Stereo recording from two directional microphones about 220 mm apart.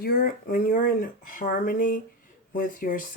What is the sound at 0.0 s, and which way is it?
Speech, 45° left (ahead or behind).